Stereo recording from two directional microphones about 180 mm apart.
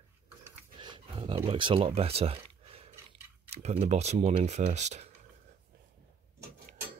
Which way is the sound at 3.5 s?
35° right (ahead or behind).